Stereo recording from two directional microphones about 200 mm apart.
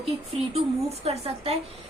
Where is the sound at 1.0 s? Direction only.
30° right (ahead or behind).